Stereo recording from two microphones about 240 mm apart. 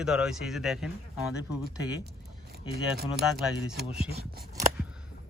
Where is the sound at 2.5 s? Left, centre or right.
Right.